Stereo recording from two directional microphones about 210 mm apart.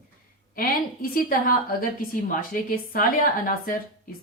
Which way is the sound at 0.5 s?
40° left (ahead or behind).